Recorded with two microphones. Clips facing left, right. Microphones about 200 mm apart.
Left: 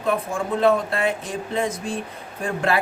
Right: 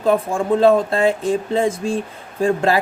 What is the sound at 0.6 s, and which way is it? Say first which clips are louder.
Speech: right 5 dB; 30° right (ahead or behind).